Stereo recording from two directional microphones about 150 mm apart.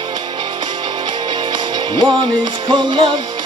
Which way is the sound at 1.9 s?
30° right (ahead or behind).